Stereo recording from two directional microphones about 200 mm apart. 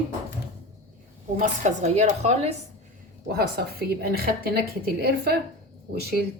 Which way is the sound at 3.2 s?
50° right (ahead or behind).